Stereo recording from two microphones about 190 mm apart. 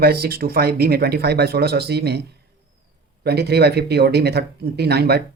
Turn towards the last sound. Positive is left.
turn(degrees=-55)  # may be behind; listen again after turning